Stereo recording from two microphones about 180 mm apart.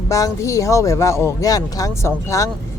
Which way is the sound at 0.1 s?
15° left (ahead or behind).